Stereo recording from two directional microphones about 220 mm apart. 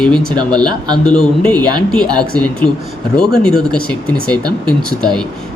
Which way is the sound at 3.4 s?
5° left (ahead or behind).